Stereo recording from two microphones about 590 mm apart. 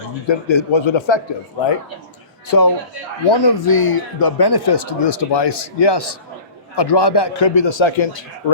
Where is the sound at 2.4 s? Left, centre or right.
Left.